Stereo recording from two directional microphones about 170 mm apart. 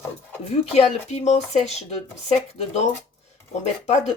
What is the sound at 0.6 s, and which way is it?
Speech, 35° left (ahead or behind).